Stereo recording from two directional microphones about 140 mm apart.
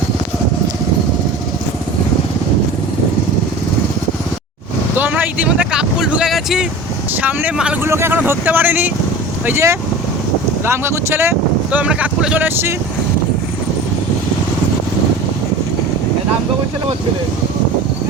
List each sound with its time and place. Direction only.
4.9 s speech: 15° right (ahead or behind)
7.9 s speech: 15° right (ahead or behind)